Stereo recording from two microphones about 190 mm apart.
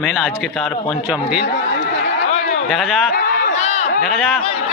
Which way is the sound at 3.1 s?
55° left (ahead or behind).